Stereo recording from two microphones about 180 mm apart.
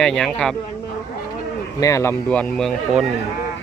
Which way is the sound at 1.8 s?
15° left (ahead or behind).